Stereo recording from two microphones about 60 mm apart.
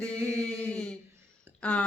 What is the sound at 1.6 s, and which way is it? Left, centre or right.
Speech, left.